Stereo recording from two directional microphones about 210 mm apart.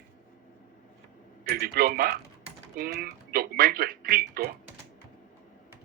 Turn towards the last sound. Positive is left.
turn(degrees=-45)  # may be behind; listen again after turning